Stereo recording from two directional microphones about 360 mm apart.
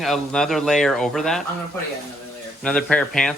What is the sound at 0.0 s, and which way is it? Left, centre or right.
Speech, centre.